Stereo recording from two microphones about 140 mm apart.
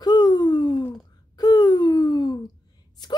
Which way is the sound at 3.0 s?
30° left (ahead or behind).